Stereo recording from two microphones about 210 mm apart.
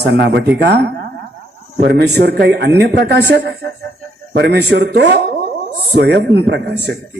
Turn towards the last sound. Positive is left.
turn(degrees=-55)  # may be behind; listen again after turning